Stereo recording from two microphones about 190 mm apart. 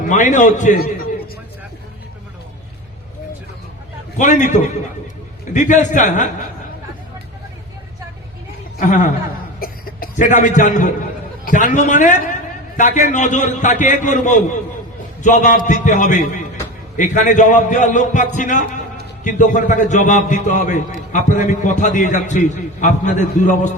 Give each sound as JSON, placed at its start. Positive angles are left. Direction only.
{"t": 0.1, "sound": "a man's voice", "side_deg": 40}
{"t": 4.2, "sound": "a man's voice", "side_deg": 40}
{"t": 8.8, "sound": "speech", "side_deg": 45}
{"t": 9.6, "sound": "cough", "side_deg": 50}
{"t": 11.4, "sound": "a man's voice", "side_deg": 40}